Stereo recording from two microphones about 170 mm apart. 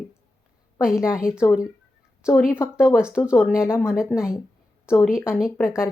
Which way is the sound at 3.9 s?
5° right (ahead or behind).